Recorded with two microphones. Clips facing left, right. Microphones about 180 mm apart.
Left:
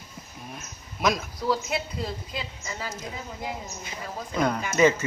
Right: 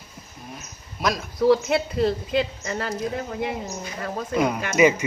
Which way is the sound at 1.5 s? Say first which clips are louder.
Right 8 dB; 70° right (ahead or behind).